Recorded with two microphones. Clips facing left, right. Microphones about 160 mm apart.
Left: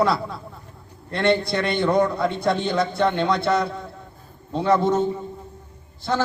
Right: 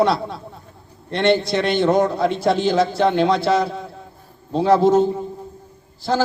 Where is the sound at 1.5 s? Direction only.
85° right.